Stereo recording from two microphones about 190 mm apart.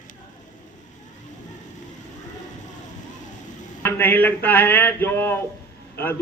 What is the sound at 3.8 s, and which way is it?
A man's voice, 10° left (ahead or behind).